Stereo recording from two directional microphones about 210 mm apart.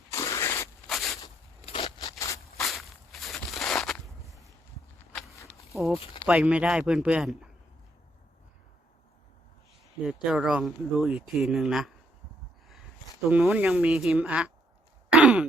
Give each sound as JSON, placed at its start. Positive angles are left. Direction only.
{"t": 0.1, "sound": "scrape", "side_deg": 15}
{"t": 0.9, "sound": "a sound", "side_deg": 0}
{"t": 1.2, "sound": "a sound", "side_deg": 25}
{"t": 2.0, "sound": "a sound", "side_deg": 15}
{"t": 2.6, "sound": "walk", "side_deg": 0}
{"t": 5.7, "sound": "speech", "side_deg": 15}
{"t": 6.2, "sound": "speech", "side_deg": -5}
{"t": 10.0, "sound": "speech", "side_deg": -5}
{"t": 13.3, "sound": "speech", "side_deg": -5}
{"t": 15.1, "sound": "sigh", "side_deg": -5}